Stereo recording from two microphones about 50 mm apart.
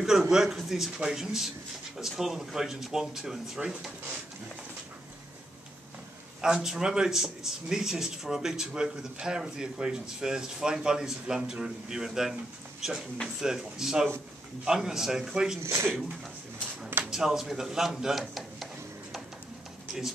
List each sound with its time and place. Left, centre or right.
0.0 s a man's voice: centre
6.4 s a man's voice: centre
15.6 s speech: right
17.1 s speech: centre